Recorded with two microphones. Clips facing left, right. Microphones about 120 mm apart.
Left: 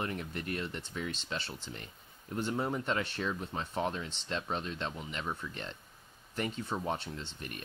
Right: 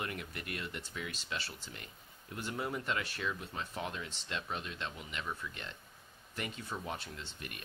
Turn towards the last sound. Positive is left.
turn(degrees=30)  # may be behind; listen again after turning